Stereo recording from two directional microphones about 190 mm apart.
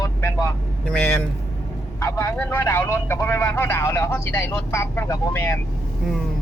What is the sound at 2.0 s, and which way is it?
Speech, 15° left (ahead or behind).